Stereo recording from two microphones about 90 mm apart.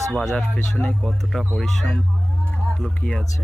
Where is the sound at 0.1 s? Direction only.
Centre (ahead or behind).